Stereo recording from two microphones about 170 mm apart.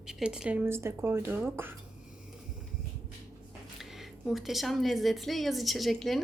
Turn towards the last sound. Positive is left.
turn(degrees=0)  # may be behind; listen again after turning